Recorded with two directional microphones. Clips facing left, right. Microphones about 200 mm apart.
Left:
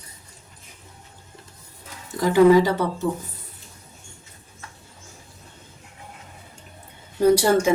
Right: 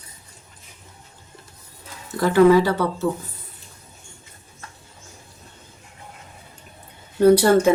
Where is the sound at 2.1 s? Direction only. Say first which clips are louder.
Even; 15° left (ahead or behind).